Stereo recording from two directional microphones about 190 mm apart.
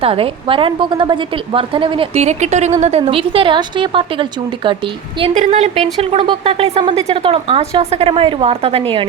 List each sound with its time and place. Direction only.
0.0 s a woman's voice: 30° right (ahead or behind)
5.2 s a woman's voice: 35° right (ahead or behind)